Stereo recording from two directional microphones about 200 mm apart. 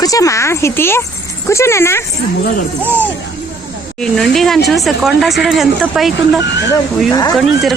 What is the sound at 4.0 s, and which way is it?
Speech, centre (ahead or behind).